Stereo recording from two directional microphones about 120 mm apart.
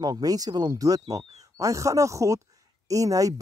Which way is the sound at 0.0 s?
30° right (ahead or behind).